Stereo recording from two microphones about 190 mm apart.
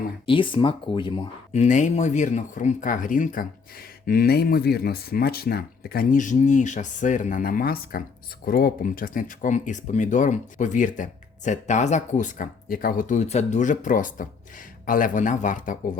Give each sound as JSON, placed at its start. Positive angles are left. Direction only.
{"t": 0.3, "sound": "speech", "side_deg": 25}
{"t": 1.5, "sound": "speech", "side_deg": 40}